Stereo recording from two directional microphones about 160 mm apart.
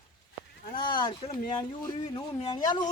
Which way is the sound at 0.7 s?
30° left (ahead or behind).